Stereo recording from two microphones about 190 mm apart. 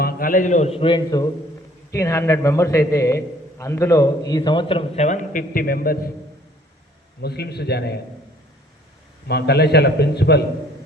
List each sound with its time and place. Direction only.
0.0 s a man's voice: 50° left (ahead or behind)
7.2 s a man's voice: 60° left (ahead or behind)
9.2 s a man's voice: 60° left (ahead or behind)